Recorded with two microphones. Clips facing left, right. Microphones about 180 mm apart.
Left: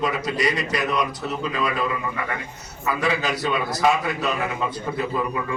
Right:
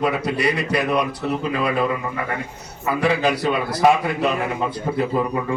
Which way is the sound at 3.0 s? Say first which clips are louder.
Right 6 dB; 55° right (ahead or behind).